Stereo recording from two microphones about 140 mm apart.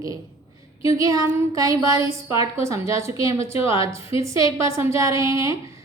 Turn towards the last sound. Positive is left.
turn(degrees=-25)  # may be behind; listen again after turning